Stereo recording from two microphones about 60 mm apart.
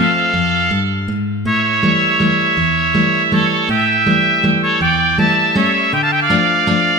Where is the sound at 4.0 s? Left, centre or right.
Centre.